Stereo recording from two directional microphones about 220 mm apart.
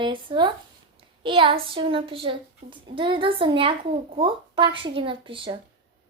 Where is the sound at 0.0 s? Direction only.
20° right (ahead or behind).